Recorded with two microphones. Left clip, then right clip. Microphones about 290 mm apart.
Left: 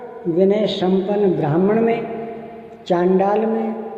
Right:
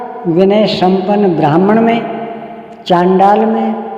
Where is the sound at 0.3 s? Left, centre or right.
Right.